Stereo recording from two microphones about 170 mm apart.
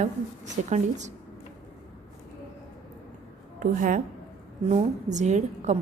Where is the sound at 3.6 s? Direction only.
55° right (ahead or behind).